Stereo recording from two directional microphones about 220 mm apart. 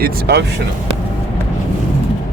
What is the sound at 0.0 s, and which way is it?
Speech, 50° right (ahead or behind).